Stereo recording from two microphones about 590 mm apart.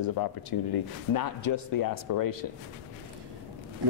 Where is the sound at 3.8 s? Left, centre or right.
Right.